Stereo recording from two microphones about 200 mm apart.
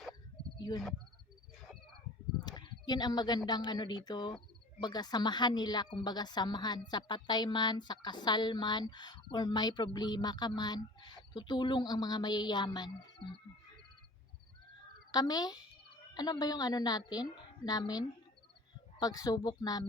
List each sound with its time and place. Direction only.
2.4 s speech: 20° left (ahead or behind)
15.1 s speech: 20° left (ahead or behind)